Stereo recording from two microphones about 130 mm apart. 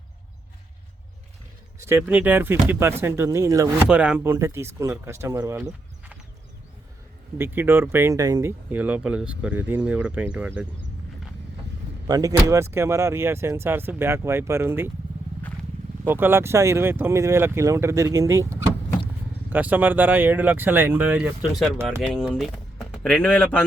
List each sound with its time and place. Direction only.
1.8 s speech: 15° right (ahead or behind)
3.8 s speech: 10° right (ahead or behind); by 5.7 s 25° right (ahead or behind)
7.3 s speech: 15° right (ahead or behind)
12.0 s speech: 30° right (ahead or behind)
16.0 s speech: 15° right (ahead or behind)
19.5 s speech: 15° right (ahead or behind)
21.8 s speech: centre (ahead or behind)
23.0 s speech: 10° left (ahead or behind)